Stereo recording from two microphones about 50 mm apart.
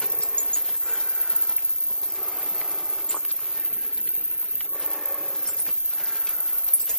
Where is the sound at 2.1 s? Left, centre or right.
Centre.